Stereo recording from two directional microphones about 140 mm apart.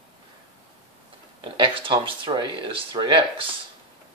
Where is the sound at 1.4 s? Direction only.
35° right (ahead or behind).